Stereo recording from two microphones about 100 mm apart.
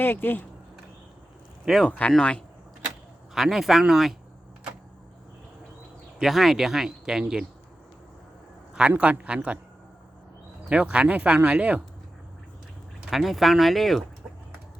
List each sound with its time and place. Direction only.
0.0 s speech: 20° left (ahead or behind)
1.6 s speech: centre (ahead or behind)
1.9 s speech: 10° left (ahead or behind)
3.3 s speech: 5° right (ahead or behind)
6.1 s speech: centre (ahead or behind)
8.9 s speech: 15° right (ahead or behind)
10.7 s speech: 10° right (ahead or behind)
13.1 s speech: centre (ahead or behind)